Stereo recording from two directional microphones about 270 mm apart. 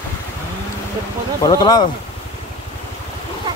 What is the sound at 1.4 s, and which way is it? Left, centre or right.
Speech, centre.